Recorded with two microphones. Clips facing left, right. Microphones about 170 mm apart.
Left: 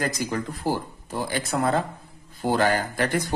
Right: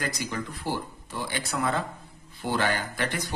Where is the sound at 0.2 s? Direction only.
40° left (ahead or behind).